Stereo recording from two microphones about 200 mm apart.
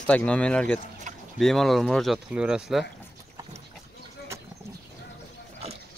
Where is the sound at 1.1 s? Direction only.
40° right (ahead or behind).